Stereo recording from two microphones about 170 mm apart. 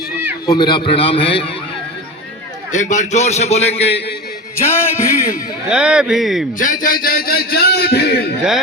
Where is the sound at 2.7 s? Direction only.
45° left (ahead or behind).